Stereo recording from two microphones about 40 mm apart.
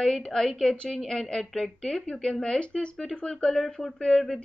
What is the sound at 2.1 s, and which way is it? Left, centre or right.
Speech, centre.